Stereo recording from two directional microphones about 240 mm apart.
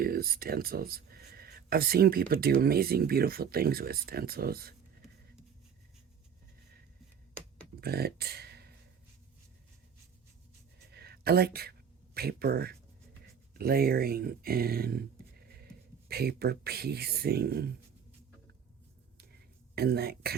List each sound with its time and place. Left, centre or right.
0.0 s speech: right
7.8 s speech: right
10.9 s a sound: right
12.1 s speech: right
16.0 s speech: right
19.1 s a sound: right